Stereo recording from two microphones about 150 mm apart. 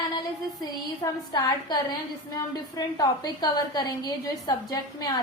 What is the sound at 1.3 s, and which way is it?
Speech, 25° left (ahead or behind).